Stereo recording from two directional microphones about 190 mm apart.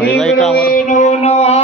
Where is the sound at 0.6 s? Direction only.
45° left (ahead or behind).